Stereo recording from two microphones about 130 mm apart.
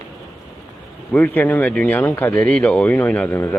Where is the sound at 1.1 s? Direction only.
15° left (ahead or behind).